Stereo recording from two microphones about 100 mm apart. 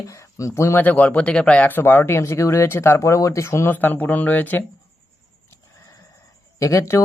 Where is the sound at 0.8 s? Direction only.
15° left (ahead or behind).